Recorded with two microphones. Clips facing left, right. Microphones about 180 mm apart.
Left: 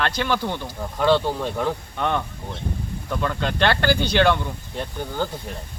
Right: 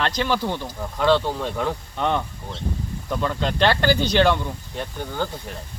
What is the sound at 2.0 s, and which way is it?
Speech, 15° right (ahead or behind).